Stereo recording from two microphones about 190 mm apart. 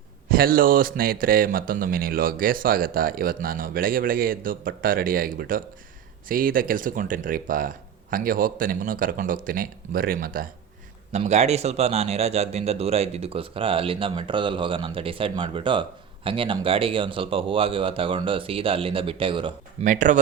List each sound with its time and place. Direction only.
0.3 s speech: 50° right (ahead or behind)
11.1 s speech: 35° right (ahead or behind)
19.8 s speech: 40° right (ahead or behind)